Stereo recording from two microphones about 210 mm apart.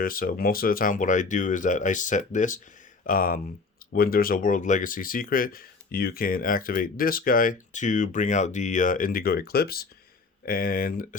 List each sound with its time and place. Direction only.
0.0 s speech: 45° left (ahead or behind)